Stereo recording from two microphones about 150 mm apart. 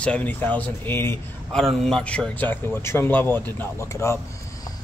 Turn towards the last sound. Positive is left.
turn(degrees=20)  # may be behind; listen again after turning